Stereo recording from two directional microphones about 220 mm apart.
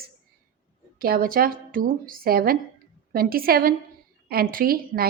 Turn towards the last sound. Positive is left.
turn(degrees=-40)  # may be behind; listen again after turning